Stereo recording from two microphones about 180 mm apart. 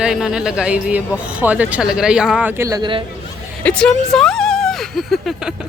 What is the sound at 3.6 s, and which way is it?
Speech, 5° left (ahead or behind).